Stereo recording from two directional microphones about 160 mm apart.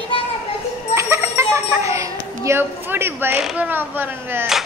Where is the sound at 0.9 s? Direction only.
15° right (ahead or behind).